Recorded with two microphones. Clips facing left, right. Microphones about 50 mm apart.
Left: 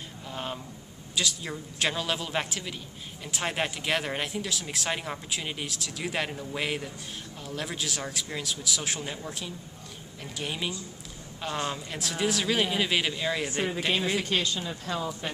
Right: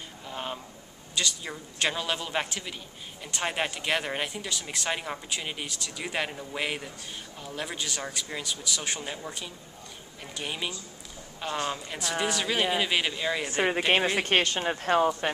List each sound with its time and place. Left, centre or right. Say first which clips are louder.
0.3 s a sound: even; centre
1.1 s speech: left 1 dB; centre
13.7 s speech: right 6 dB; right